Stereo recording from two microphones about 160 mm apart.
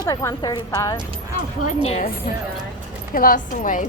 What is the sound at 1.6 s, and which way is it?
Speech, 45° left (ahead or behind).